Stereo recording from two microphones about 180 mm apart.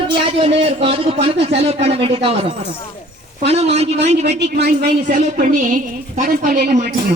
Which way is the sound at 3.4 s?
35° right (ahead or behind).